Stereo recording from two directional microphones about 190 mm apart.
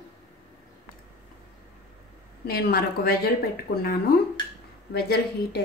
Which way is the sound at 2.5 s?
55° left (ahead or behind).